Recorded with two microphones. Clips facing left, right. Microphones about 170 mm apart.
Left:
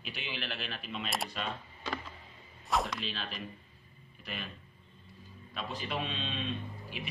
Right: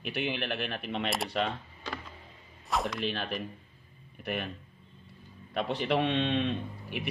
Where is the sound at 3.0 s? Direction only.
55° right (ahead or behind).